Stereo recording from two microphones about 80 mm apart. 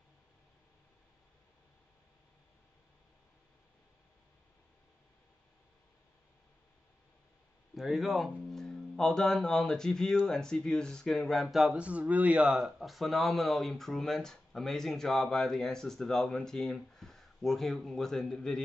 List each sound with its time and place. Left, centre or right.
7.7 s speech: centre
11.4 s a sound: centre
11.8 s speech: centre